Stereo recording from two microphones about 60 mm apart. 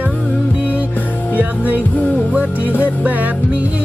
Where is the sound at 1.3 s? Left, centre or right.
Right.